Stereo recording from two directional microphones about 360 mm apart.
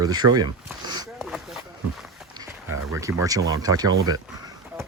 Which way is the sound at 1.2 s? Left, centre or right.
Centre.